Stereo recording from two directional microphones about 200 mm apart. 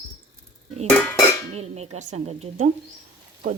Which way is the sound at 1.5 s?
30° right (ahead or behind).